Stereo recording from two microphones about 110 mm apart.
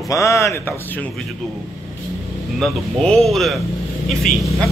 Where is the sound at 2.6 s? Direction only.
5° left (ahead or behind).